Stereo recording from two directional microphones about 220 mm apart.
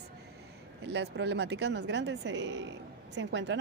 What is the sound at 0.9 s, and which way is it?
A woman's voice, 50° right (ahead or behind).